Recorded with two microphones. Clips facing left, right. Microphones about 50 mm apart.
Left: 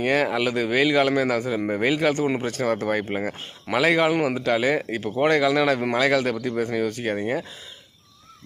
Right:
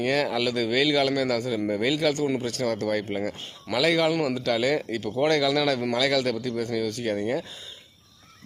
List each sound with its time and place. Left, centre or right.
0.0 s speech: left